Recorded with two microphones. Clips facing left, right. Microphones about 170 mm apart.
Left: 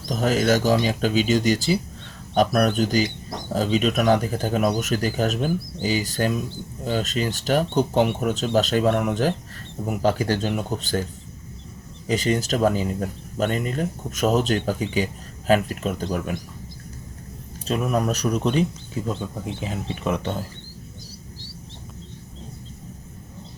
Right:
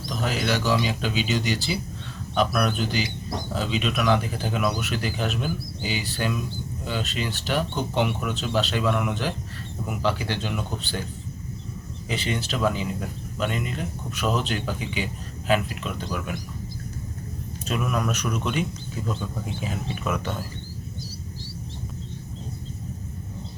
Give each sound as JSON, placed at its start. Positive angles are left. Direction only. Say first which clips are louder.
{"t": 0.0, "sound": "speech", "louder": "left 6 dB", "side_deg": 45}
{"t": 12.0, "sound": "speech", "louder": "left 7 dB", "side_deg": 40}
{"t": 17.7, "sound": "speech", "louder": "left 4 dB", "side_deg": 30}